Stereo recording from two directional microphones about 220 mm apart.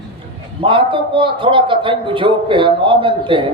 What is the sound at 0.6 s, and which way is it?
A man's voice, 25° right (ahead or behind).